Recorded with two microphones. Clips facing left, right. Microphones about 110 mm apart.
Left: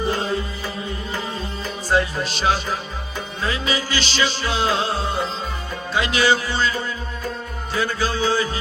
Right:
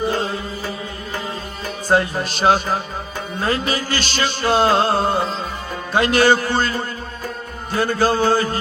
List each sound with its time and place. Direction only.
1.9 s music: 50° right (ahead or behind)